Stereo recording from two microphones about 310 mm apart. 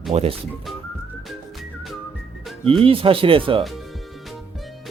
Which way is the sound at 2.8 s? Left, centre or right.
Centre.